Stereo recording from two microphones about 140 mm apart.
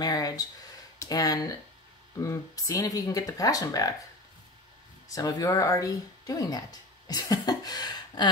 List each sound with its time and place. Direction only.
0.0 s speech: 25° left (ahead or behind)
5.1 s speech: 25° left (ahead or behind)